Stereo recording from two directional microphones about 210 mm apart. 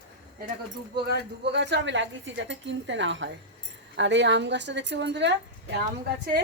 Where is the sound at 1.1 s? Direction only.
55° right (ahead or behind).